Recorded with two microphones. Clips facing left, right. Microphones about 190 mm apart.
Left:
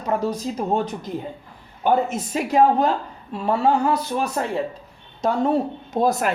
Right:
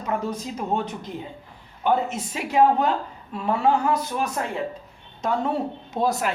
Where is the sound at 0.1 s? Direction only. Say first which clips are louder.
Left 4 dB; 35° left (ahead or behind).